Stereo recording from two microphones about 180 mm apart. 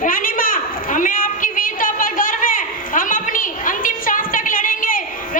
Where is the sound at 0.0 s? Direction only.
50° left (ahead or behind).